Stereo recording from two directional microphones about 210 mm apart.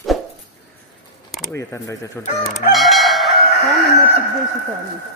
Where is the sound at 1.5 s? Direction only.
15° left (ahead or behind).